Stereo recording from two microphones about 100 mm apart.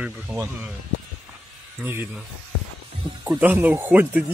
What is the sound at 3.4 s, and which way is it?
Speech, 15° right (ahead or behind).